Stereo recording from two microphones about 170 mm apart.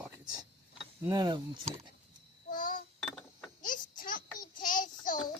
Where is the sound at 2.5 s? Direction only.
55° left (ahead or behind).